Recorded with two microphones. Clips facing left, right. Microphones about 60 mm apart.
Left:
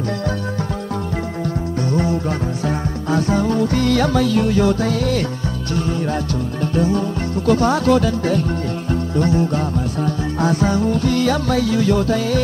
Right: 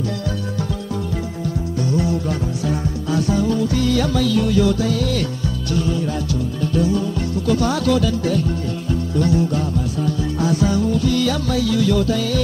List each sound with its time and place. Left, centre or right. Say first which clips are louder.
1.9 s music: left 1 dB; left